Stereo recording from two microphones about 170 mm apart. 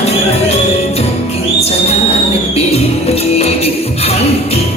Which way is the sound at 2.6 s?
40° left (ahead or behind).